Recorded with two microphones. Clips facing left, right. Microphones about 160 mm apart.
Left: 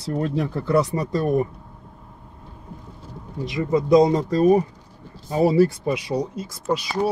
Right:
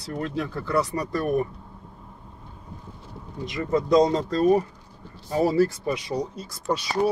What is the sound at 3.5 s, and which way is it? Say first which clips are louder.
Speech: left 3 dB; 15° left (ahead or behind).